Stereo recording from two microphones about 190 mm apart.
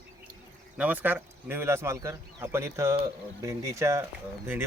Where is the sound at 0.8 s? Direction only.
10° right (ahead or behind).